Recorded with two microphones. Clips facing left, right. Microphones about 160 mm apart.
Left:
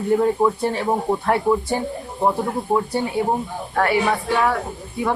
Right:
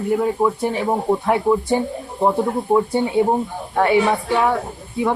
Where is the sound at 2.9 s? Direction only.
20° right (ahead or behind).